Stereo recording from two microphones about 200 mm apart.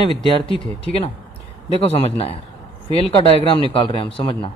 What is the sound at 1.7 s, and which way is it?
Speech, 30° left (ahead or behind).